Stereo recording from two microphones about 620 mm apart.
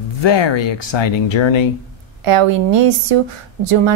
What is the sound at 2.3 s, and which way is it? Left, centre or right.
Speech, right.